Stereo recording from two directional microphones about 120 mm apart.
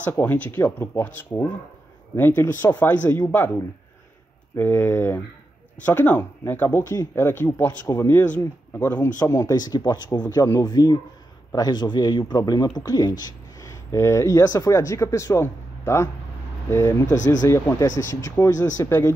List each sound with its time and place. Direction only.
0.0 s speech: 15° left (ahead or behind)
4.6 s speech: 15° left (ahead or behind)
7.8 s speech: 30° left (ahead or behind)
8.4 s speech: 15° left (ahead or behind)
9.2 s speech: 30° left (ahead or behind)